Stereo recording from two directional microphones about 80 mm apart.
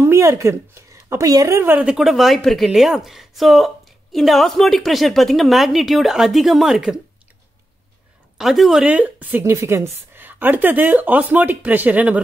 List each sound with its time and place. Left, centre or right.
0.0 s a woman's voice: right
1.8 s a woman's voice: centre
8.4 s a woman's voice: centre
8.8 s speech: centre
9.4 s a woman's voice: right